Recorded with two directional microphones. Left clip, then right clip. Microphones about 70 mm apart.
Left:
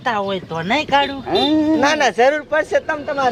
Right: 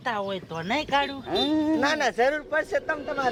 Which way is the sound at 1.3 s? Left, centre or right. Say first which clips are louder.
Left 8 dB; right.